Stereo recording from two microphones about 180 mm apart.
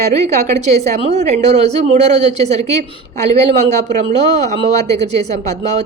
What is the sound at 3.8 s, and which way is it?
A woman's voice, 40° right (ahead or behind).